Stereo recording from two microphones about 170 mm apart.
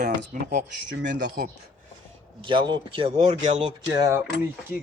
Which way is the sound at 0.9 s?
90° right.